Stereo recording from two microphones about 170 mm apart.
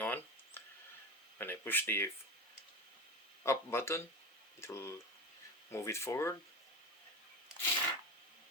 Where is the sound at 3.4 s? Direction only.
15° left (ahead or behind).